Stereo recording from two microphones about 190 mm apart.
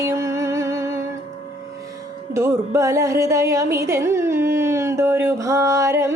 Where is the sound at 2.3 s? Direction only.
15° right (ahead or behind).